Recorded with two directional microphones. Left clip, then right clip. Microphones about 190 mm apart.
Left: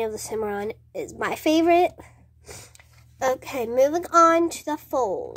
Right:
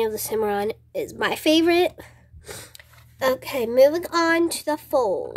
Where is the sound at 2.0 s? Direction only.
20° right (ahead or behind).